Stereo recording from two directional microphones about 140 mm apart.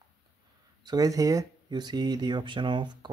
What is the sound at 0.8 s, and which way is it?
Speech, 25° right (ahead or behind).